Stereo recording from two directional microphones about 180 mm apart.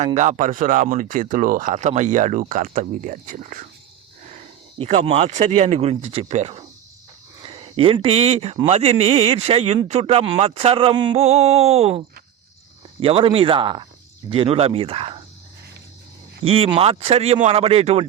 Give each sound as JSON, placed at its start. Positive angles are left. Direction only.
{"t": 0.0, "sound": "speech", "side_deg": -40}
{"t": 5.0, "sound": "speech", "side_deg": -35}
{"t": 16.4, "sound": "speech", "side_deg": -30}